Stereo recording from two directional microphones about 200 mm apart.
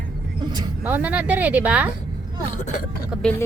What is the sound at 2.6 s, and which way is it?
Speech, 40° left (ahead or behind).